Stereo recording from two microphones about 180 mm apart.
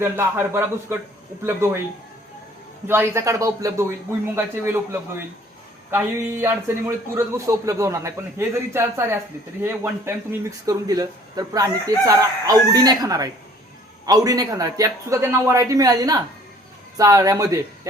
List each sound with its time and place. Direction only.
0.0 s a man's voice: 15° right (ahead or behind)
2.8 s a man's voice: 10° right (ahead or behind)